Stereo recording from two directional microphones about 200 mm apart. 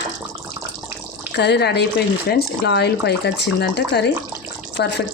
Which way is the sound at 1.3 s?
55° left (ahead or behind).